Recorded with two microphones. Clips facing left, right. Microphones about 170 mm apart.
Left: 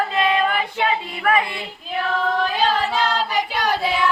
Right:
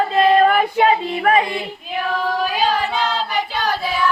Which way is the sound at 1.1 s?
30° right (ahead or behind).